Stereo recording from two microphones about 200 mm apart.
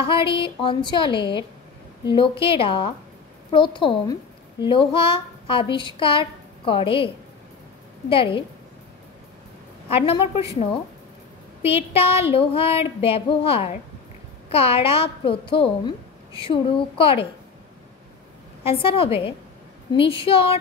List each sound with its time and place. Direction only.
0.0 s child singing: 25° left (ahead or behind)
3.5 s a woman's voice: 25° left (ahead or behind)
8.1 s child singing: 25° left (ahead or behind)
9.8 s child singing: 30° left (ahead or behind)
11.6 s child singing: 30° left (ahead or behind)
18.6 s child singing: 30° left (ahead or behind)